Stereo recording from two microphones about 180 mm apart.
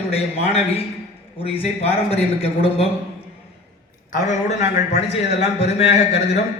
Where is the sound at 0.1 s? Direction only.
35° left (ahead or behind).